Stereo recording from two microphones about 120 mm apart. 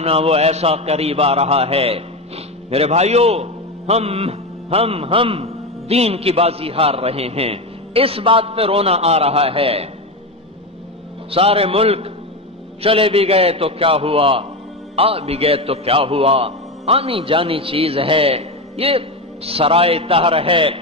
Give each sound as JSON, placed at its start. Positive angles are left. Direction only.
{"t": 0.0, "sound": "a man's voice", "side_deg": -55}
{"t": 11.2, "sound": "a man's voice", "side_deg": -50}